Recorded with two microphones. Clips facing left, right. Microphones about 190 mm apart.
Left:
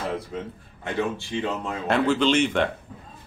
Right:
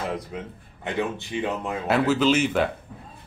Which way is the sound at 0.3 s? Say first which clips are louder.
Left 2 dB; 10° right (ahead or behind).